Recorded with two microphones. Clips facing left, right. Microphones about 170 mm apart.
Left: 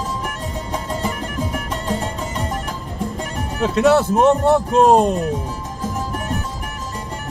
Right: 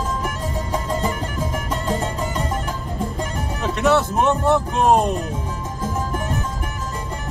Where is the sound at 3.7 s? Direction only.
30° left (ahead or behind).